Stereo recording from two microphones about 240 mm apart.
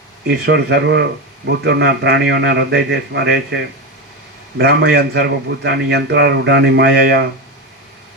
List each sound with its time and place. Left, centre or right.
0.3 s a man's voice: right